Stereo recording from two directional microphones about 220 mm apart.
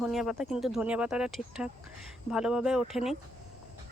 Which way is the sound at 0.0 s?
Centre (ahead or behind).